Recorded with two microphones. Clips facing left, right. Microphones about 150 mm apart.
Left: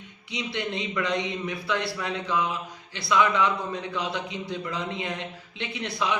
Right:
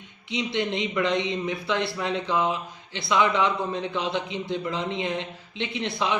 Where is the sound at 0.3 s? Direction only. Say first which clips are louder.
Right 4 dB; 20° right (ahead or behind).